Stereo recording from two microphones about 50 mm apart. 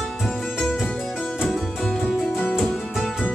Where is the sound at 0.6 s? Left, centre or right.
Centre.